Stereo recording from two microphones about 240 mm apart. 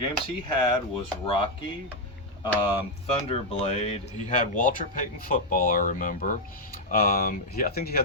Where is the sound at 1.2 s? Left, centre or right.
Left.